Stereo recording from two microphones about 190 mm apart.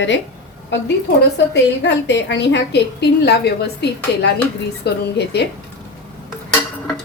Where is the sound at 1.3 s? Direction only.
65° left (ahead or behind).